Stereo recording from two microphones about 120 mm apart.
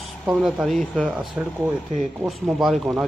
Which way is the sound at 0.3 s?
Centre (ahead or behind).